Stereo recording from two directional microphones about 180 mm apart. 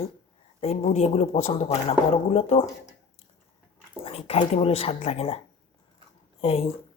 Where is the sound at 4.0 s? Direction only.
35° left (ahead or behind).